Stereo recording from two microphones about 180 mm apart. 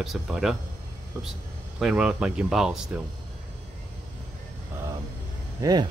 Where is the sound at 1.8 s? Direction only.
5° right (ahead or behind).